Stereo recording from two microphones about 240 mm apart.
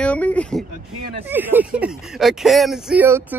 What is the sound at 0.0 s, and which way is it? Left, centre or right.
Speech, centre.